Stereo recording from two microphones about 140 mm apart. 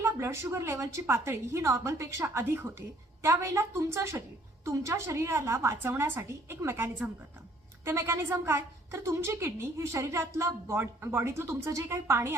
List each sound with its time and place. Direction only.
0.0 s a woman's voice: 20° right (ahead or behind)